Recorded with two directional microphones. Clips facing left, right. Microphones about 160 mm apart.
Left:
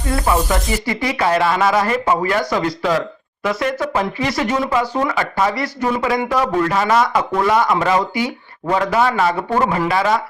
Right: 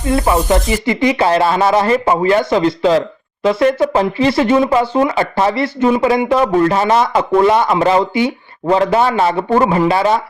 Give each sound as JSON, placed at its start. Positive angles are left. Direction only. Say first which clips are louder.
{"t": 0.1, "sound": "speech", "louder": "right 5 dB", "side_deg": -25}